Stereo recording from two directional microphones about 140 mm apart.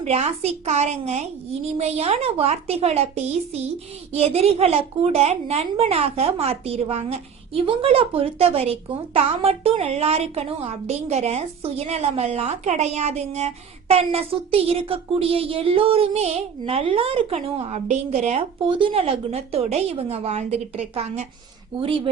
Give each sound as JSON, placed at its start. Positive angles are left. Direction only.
{"t": 0.0, "sound": "a woman's voice", "side_deg": -50}
{"t": 18.6, "sound": "a woman's voice", "side_deg": -40}